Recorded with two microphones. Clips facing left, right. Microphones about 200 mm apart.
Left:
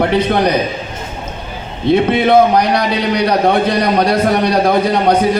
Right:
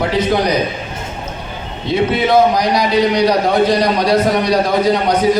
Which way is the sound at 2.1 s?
60° left (ahead or behind).